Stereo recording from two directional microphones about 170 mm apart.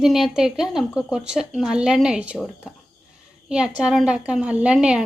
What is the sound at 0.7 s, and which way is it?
Speech, 5° right (ahead or behind).